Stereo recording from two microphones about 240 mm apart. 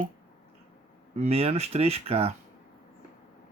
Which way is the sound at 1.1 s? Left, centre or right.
Right.